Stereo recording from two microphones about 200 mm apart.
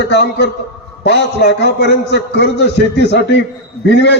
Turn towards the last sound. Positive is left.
turn(degrees=60)  # may be behind; listen again after turning